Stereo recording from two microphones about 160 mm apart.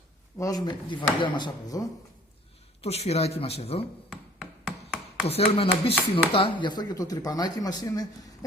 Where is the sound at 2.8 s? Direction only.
40° left (ahead or behind).